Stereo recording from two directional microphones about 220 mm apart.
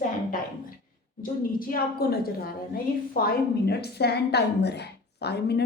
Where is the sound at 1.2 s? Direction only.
40° left (ahead or behind).